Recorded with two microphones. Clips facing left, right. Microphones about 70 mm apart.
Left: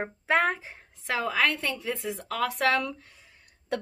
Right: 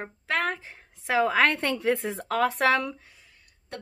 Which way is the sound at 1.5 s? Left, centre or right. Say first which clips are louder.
Right 6 dB; right.